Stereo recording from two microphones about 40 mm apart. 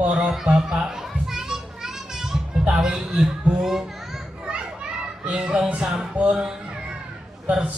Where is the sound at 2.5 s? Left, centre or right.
Right.